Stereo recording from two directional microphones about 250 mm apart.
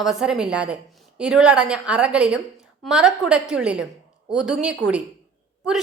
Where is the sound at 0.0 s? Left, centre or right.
Centre.